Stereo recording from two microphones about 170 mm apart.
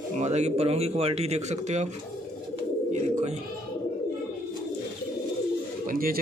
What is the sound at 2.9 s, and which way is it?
Bird, 45° right (ahead or behind).